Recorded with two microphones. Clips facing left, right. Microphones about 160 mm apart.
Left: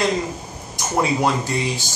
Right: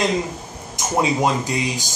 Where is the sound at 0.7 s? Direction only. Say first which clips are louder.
Right 1 dB; 20° right (ahead or behind).